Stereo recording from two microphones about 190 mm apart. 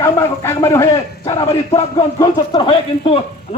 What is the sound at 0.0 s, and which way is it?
Speech, 15° left (ahead or behind).